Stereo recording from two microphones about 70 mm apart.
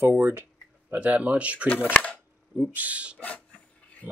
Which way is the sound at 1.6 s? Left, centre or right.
Left.